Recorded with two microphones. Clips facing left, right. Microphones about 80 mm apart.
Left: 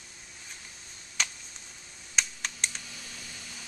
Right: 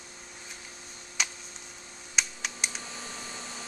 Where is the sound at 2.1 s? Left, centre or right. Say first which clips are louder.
Even; centre.